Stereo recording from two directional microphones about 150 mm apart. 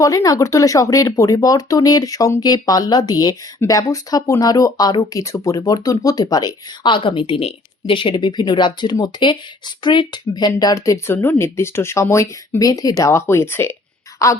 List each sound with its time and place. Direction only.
0.0 s speech: 20° left (ahead or behind)